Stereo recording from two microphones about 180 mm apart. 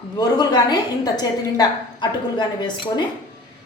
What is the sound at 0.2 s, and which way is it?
A woman's voice, 25° left (ahead or behind).